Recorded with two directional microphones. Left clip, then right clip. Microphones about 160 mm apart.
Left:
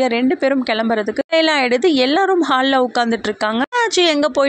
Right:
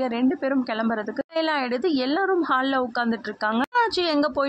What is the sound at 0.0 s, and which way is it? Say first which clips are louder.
Speech: left 8 dB; 25° left (ahead or behind).